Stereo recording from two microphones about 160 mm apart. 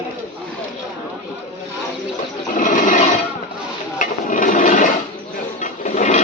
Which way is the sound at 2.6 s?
55° left (ahead or behind).